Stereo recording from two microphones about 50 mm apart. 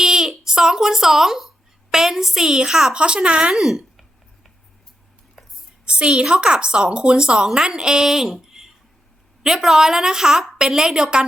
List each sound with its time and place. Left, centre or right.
0.0 s speech: centre
3.5 s speech: centre
5.8 s a woman's voice: centre